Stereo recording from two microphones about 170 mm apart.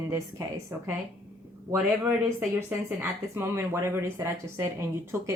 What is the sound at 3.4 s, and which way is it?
Speech, 15° right (ahead or behind).